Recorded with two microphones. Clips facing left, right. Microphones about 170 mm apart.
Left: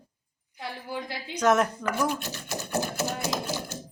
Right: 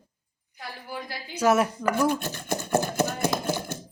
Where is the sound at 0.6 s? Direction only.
20° left (ahead or behind).